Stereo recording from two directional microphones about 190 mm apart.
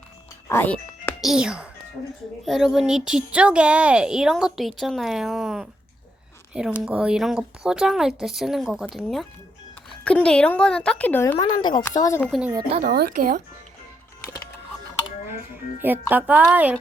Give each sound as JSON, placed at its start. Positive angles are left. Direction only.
{"t": 0.4, "sound": "music", "side_deg": 10}
{"t": 1.2, "sound": "a woman's voice", "side_deg": -5}
{"t": 11.3, "sound": "a woman's voice", "side_deg": 25}
{"t": 12.2, "sound": "speech", "side_deg": 0}
{"t": 12.8, "sound": "speech", "side_deg": -50}
{"t": 15.8, "sound": "speech", "side_deg": -10}